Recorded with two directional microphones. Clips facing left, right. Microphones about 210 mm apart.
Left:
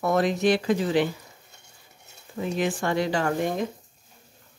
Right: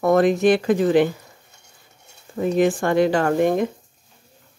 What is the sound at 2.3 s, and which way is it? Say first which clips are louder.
Speech: right 8 dB; 50° right (ahead or behind).